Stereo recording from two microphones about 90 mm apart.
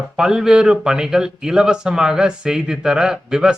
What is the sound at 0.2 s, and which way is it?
A man's voice, 5° right (ahead or behind).